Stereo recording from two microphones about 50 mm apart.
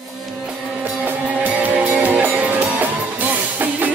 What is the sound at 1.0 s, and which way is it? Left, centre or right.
Music, right.